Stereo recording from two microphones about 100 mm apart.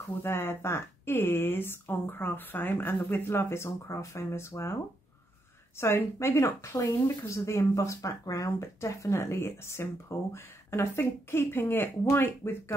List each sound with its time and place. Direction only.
0.2 s speech: 25° left (ahead or behind)
5.8 s speech: 25° left (ahead or behind)